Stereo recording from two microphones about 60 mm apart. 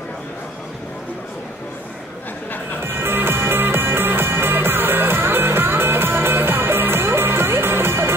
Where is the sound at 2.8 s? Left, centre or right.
Right.